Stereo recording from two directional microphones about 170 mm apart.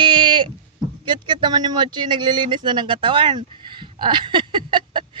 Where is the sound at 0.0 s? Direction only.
30° right (ahead or behind).